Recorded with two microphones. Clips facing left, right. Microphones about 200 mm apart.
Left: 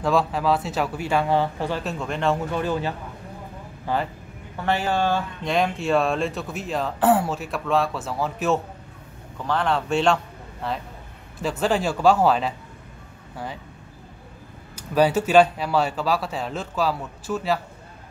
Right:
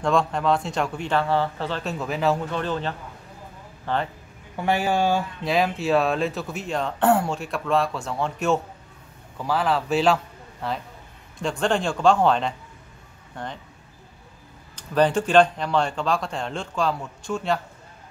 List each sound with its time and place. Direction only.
0.0 s speech: 5° left (ahead or behind)
1.8 s speech: centre (ahead or behind)
2.5 s speech: 10° left (ahead or behind)
4.6 s a man's voice: 15° right (ahead or behind); by 13.5 s 5° left (ahead or behind)
14.8 s speech: 10° left (ahead or behind)